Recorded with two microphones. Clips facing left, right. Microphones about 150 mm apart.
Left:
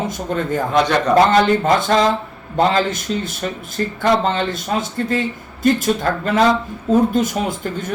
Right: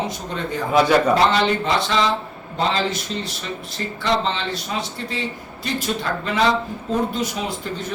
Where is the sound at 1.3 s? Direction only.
50° left (ahead or behind).